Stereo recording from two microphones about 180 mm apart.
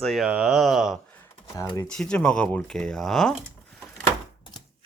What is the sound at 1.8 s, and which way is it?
Speech, 5° left (ahead or behind).